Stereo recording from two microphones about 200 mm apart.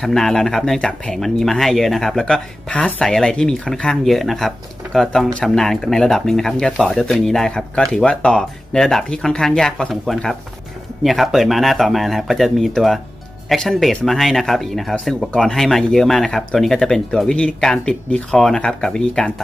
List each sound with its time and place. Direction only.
0.0 s speech: centre (ahead or behind)